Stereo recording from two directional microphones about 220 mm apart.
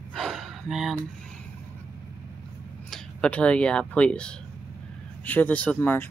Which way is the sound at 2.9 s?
5° left (ahead or behind).